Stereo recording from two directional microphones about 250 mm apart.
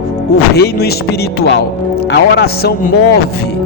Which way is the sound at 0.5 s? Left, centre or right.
Left.